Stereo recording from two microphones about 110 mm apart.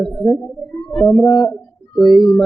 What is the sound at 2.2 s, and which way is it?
Speech, centre (ahead or behind).